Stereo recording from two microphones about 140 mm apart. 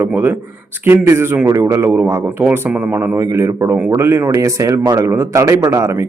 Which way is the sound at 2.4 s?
10° right (ahead or behind).